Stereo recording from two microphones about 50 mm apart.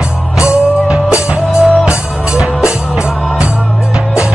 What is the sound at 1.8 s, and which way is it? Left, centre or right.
Music, centre.